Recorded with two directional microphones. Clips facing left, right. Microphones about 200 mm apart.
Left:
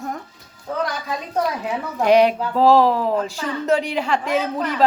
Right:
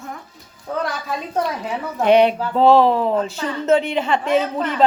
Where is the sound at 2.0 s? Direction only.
Centre (ahead or behind).